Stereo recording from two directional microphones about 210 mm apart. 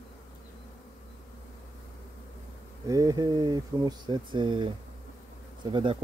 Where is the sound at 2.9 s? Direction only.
15° right (ahead or behind).